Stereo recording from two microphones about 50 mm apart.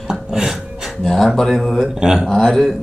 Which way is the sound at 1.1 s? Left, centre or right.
Centre.